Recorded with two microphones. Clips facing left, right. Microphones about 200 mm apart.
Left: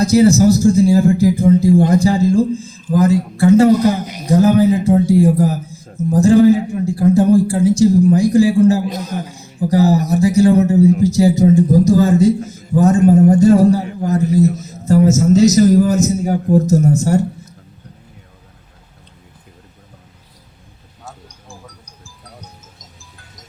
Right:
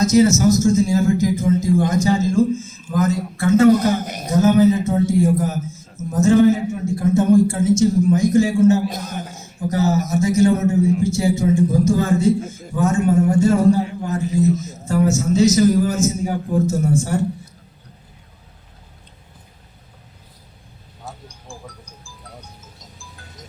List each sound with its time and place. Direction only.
0.0 s a man's voice: 35° left (ahead or behind)
4.0 s speech: 50° right (ahead or behind)
4.3 s a man's voice: 35° left (ahead or behind)